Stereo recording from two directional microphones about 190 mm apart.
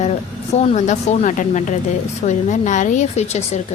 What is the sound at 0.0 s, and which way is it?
A woman's voice, 35° left (ahead or behind).